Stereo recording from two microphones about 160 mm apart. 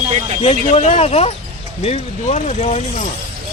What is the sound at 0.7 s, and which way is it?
Speech, 40° left (ahead or behind).